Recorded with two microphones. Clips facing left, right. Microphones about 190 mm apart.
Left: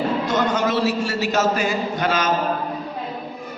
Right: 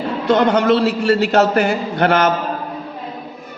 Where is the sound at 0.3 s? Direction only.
60° right (ahead or behind).